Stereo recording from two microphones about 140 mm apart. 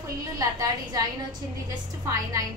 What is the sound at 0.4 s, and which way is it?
Speech, 25° right (ahead or behind).